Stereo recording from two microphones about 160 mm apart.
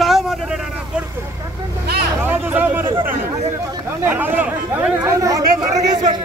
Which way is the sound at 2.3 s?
10° right (ahead or behind).